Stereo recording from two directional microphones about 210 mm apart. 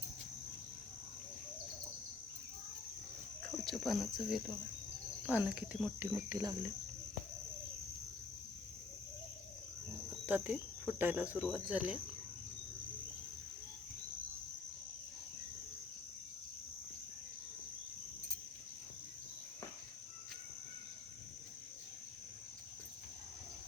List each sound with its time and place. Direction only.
3.6 s speech: centre (ahead or behind)
6.2 s speech: 15° right (ahead or behind)
10.2 s speech: 5° right (ahead or behind)